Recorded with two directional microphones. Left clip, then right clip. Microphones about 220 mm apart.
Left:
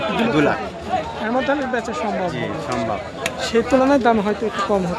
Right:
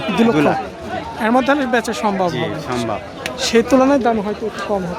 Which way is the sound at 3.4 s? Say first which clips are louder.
Right 4 dB; 30° right (ahead or behind).